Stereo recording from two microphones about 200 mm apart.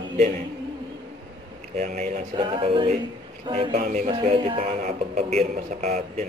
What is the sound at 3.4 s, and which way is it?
Speech, 25° right (ahead or behind).